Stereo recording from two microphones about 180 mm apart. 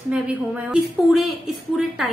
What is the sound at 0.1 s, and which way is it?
A woman's voice, 5° right (ahead or behind).